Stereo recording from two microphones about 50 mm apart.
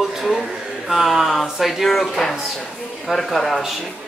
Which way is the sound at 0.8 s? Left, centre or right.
Centre.